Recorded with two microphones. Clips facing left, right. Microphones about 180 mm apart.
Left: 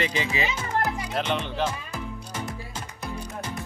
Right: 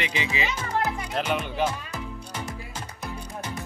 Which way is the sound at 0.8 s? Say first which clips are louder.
Even; centre (ahead or behind).